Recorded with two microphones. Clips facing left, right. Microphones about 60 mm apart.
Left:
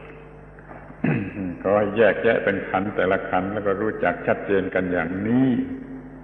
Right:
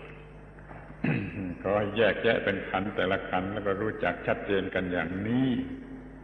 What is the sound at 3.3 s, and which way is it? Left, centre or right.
Speech, centre.